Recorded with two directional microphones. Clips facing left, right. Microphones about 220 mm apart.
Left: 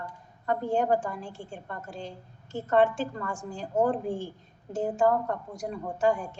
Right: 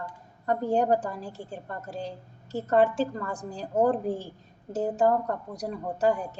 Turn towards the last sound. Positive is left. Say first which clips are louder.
# right 1 dB
turn(degrees=-40)  # may be behind; listen again after turning